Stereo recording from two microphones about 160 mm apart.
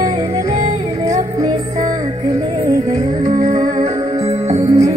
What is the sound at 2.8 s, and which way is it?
Music, 25° right (ahead or behind).